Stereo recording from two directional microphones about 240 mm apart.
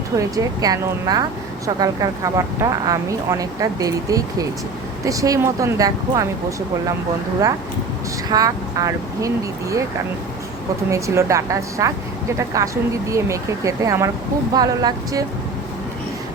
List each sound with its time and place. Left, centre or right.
0.2 s speech: centre
8.3 s speech: centre
10.9 s speech: centre